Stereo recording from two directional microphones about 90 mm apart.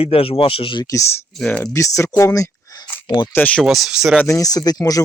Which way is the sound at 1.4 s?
20° left (ahead or behind).